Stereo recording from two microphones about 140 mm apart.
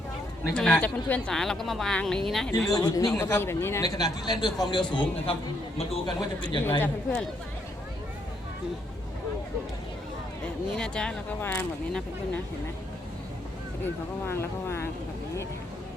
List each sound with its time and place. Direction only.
0.5 s a woman's voice: 5° left (ahead or behind)
2.5 s a man's voice: 25° left (ahead or behind)
6.7 s speech: 15° left (ahead or behind)
10.8 s speech: 5° left (ahead or behind)
13.8 s speech: 20° left (ahead or behind)